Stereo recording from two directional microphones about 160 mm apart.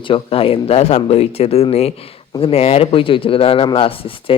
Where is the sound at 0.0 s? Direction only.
35° left (ahead or behind).